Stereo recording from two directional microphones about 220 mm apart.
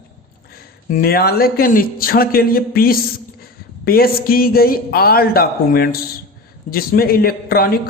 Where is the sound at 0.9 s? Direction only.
45° left (ahead or behind).